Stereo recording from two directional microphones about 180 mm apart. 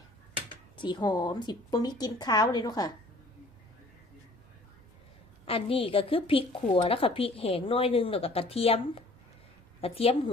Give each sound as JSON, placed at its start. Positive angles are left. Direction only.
{"t": 0.8, "sound": "a woman's voice", "side_deg": 25}
{"t": 5.5, "sound": "a woman's voice", "side_deg": 30}